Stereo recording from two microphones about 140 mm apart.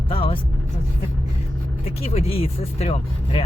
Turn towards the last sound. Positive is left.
turn(degrees=45)  # may be behind; listen again after turning